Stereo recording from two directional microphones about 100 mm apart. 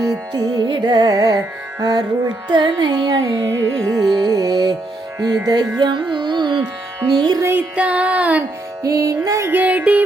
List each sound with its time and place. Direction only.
0.0 s music: 35° right (ahead or behind)
2.5 s carnatic music: 50° right (ahead or behind); by 4.0 s 35° right (ahead or behind)
4.1 s music: 40° right (ahead or behind)
7.1 s carnatic music: 45° right (ahead or behind)
7.8 s music: 15° right (ahead or behind)
8.8 s music: 30° right (ahead or behind)
9.5 s music: 15° right (ahead or behind)